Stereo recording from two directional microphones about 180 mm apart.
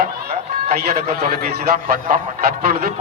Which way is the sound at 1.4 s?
55° right (ahead or behind).